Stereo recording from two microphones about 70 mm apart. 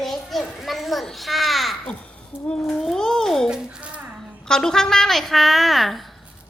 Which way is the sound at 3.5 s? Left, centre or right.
Centre.